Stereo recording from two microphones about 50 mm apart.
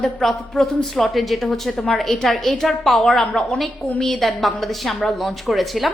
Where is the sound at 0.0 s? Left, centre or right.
Centre.